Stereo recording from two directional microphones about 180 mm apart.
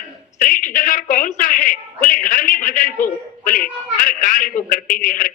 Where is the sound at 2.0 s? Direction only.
45° left (ahead or behind).